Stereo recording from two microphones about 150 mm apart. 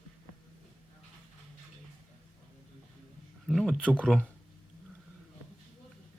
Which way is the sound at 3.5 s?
Centre (ahead or behind).